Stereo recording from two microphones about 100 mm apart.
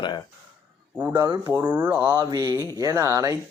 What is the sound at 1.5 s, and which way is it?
Speech, 25° right (ahead or behind).